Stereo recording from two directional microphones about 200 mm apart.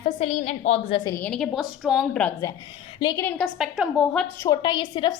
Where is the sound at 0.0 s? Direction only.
35° left (ahead or behind).